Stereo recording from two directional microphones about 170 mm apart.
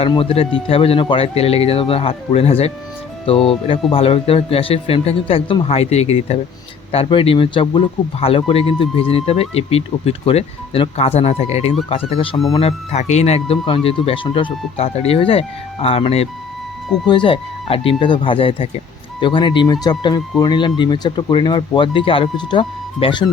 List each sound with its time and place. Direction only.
0.0 s speech: 35° left (ahead or behind)